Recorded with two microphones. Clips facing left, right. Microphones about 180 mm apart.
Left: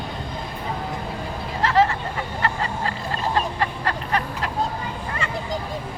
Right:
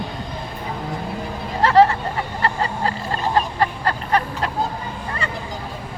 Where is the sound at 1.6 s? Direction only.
40° right (ahead or behind).